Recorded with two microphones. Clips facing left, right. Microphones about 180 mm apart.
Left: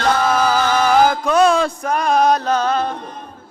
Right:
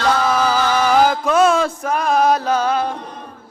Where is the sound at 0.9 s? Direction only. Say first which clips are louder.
Even; 5° right (ahead or behind).